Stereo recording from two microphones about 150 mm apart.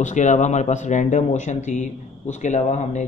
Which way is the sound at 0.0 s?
50° left (ahead or behind).